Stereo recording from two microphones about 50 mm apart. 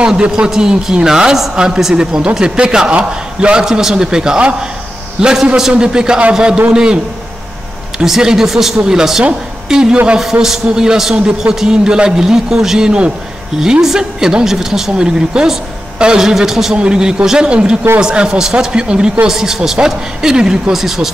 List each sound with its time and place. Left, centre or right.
0.0 s a man's voice: centre
8.0 s a man's voice: centre